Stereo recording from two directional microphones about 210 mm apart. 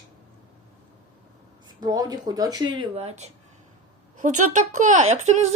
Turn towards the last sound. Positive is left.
turn(degrees=-35)  # may be behind; listen again after turning